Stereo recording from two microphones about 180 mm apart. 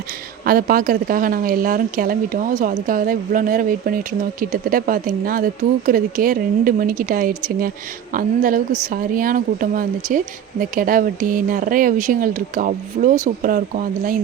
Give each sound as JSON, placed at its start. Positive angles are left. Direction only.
{"t": 0.4, "sound": "speech", "side_deg": -55}